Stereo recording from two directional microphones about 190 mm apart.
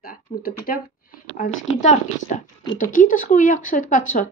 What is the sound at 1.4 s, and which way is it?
Speech, 40° left (ahead or behind).